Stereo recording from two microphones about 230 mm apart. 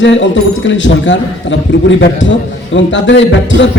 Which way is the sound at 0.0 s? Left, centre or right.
Left.